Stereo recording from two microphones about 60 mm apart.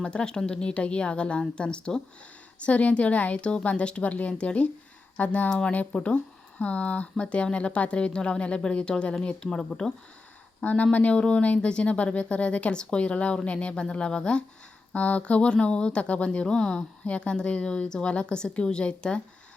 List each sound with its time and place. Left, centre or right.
0.0 s speech: centre
10.6 s speech: left